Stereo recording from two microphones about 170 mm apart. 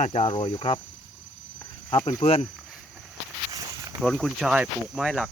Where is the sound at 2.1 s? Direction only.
40° left (ahead or behind).